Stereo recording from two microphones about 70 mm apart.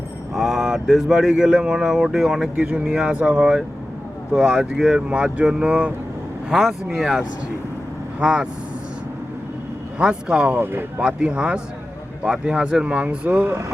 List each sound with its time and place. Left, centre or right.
0.3 s speech: centre
6.5 s speech: centre
10.0 s speech: centre
10.6 s speech: right
11.0 s speech: centre
13.5 s speech: right